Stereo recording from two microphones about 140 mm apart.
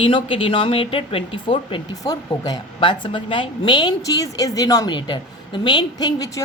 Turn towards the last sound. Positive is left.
turn(degrees=25)  # may be behind; listen again after turning